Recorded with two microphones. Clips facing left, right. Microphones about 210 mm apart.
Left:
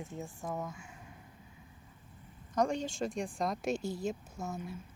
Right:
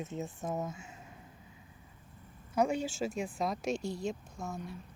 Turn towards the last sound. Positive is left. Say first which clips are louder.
# left 1 dB
turn(degrees=0)  # may be behind; listen again after turning